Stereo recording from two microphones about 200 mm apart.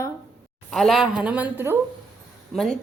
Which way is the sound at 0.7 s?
Centre (ahead or behind).